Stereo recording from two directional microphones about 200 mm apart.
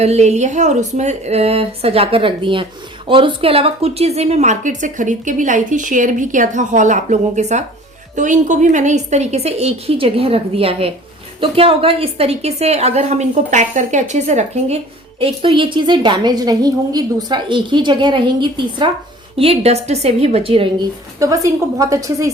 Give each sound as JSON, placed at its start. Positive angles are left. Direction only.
{"t": 0.0, "sound": "a woman's voice", "side_deg": -35}
{"t": 21.2, "sound": "a woman's voice", "side_deg": -15}